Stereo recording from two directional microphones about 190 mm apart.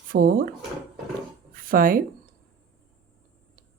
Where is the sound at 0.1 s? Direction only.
45° right (ahead or behind).